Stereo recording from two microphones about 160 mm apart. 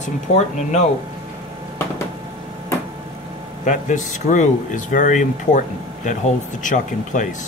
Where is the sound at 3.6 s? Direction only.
50° left (ahead or behind).